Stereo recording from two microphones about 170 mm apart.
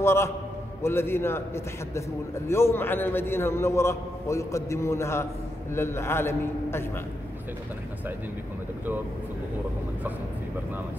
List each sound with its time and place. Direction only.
0.0 s a man's voice: 15° left (ahead or behind)